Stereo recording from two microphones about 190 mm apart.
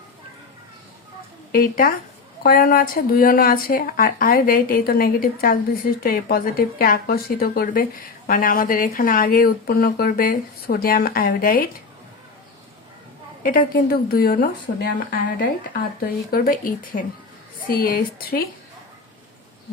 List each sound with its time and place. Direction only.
1.5 s speech: 50° left (ahead or behind)
13.4 s speech: 45° left (ahead or behind)